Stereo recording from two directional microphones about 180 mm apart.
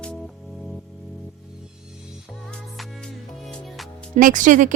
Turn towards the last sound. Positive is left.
turn(degrees=-45)  # may be behind; listen again after turning